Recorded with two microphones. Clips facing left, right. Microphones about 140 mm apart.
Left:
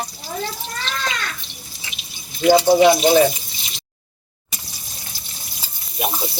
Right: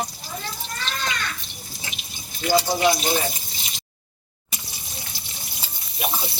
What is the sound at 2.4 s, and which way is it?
Speech, 60° left (ahead or behind).